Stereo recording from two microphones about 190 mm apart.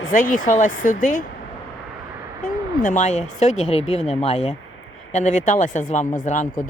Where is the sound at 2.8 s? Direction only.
40° left (ahead or behind).